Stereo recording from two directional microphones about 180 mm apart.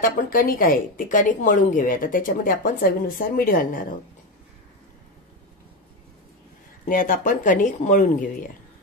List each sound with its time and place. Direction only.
0.0 s a woman's voice: 50° left (ahead or behind)
6.9 s a woman's voice: 50° left (ahead or behind)